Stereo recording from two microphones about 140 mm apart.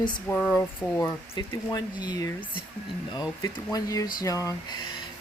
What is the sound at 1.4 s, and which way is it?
Speech, 30° left (ahead or behind).